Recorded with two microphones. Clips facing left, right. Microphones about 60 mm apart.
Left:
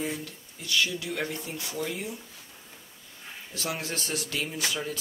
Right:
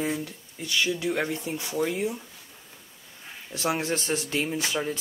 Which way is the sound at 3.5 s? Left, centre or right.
Right.